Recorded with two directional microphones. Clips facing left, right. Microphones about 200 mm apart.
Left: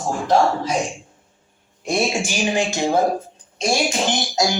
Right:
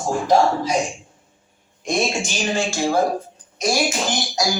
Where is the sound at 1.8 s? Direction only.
15° left (ahead or behind).